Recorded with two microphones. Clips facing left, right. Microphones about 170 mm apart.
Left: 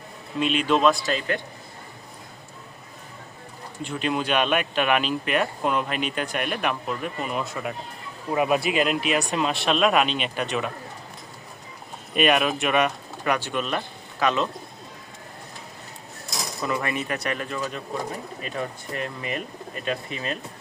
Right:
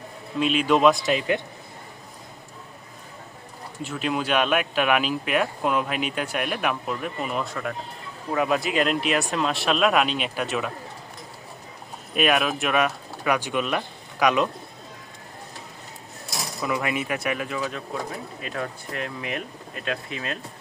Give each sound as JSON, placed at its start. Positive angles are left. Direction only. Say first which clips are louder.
{"t": 0.3, "sound": "speech", "louder": "right 1 dB", "side_deg": 0}
{"t": 3.8, "sound": "speech", "louder": "even", "side_deg": 0}
{"t": 8.3, "sound": "speech", "louder": "left 1 dB", "side_deg": 20}
{"t": 8.7, "sound": "speech", "louder": "even", "side_deg": 5}
{"t": 12.1, "sound": "speech", "louder": "left 1 dB", "side_deg": 0}
{"t": 16.6, "sound": "speech", "louder": "right 1 dB", "side_deg": -10}